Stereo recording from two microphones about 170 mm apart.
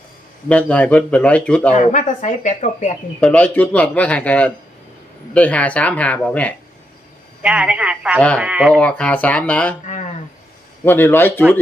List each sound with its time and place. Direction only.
0.4 s speech: 5° left (ahead or behind)
1.7 s speech: 45° left (ahead or behind)
3.2 s speech: 5° left (ahead or behind)
7.4 s speech: 5° right (ahead or behind)
8.7 s speech: 5° left (ahead or behind)
9.8 s a sound: 40° left (ahead or behind)
10.8 s speech: 15° left (ahead or behind)